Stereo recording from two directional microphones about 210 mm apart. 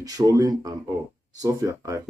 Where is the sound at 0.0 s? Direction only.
20° right (ahead or behind).